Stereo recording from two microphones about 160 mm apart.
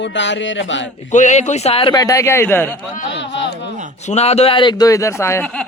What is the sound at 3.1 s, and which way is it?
Speech, 90° left.